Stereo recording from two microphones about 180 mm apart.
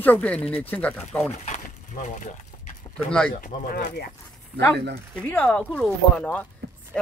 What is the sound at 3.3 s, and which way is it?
Speech, 45° left (ahead or behind).